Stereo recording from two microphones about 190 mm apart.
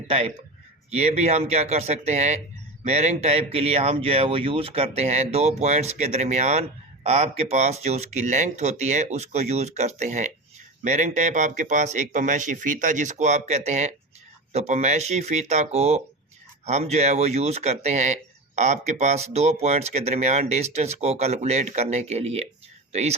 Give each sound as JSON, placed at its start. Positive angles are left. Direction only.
{"t": 0.1, "sound": "speech", "side_deg": -30}